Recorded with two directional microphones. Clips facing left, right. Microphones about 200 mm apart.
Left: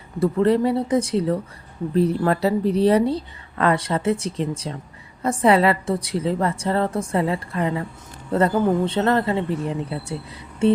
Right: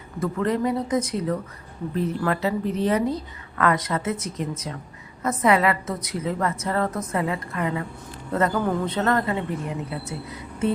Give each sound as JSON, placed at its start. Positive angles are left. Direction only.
{"t": 0.2, "sound": "a woman's voice", "side_deg": 30}